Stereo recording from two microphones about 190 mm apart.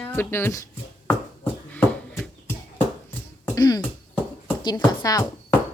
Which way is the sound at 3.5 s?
20° left (ahead or behind).